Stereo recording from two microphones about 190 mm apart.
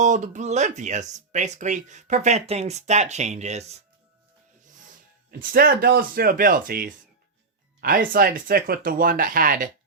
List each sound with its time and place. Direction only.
0.0 s speech: 40° right (ahead or behind)
5.4 s speech: 50° right (ahead or behind)